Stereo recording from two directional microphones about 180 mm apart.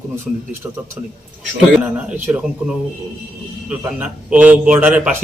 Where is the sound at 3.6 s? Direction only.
10° right (ahead or behind).